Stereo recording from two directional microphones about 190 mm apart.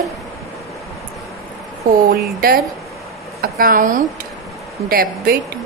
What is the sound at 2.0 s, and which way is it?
Speech, 50° right (ahead or behind).